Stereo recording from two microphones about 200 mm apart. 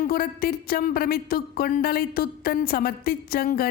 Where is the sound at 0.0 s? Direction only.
45° left (ahead or behind).